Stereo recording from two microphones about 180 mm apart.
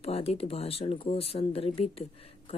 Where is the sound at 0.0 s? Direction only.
35° left (ahead or behind).